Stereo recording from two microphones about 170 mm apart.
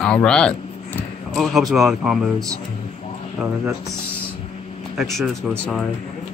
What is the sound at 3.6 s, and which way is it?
Speech, 10° right (ahead or behind).